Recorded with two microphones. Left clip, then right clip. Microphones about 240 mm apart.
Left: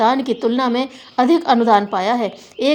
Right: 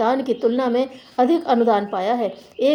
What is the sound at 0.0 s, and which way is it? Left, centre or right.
A woman's voice, left.